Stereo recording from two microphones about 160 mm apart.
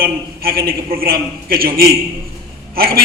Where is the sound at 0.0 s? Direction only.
70° right (ahead or behind).